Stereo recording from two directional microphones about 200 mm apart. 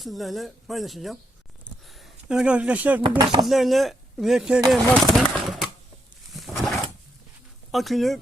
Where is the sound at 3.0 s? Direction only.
20° right (ahead or behind).